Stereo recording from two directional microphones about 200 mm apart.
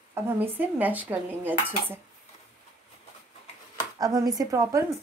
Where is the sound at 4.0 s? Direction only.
20° right (ahead or behind).